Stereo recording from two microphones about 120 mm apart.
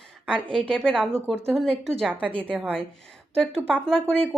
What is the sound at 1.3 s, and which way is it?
Speech, 20° right (ahead or behind).